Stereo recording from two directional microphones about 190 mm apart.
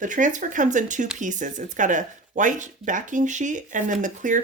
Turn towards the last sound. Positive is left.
turn(degrees=-40)  # may be behind; listen again after turning